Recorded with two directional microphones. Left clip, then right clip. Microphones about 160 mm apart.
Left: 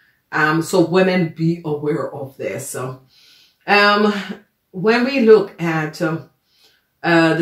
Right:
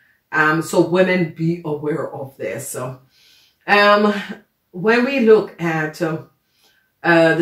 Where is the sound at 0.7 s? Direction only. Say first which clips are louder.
Even; 25° left (ahead or behind).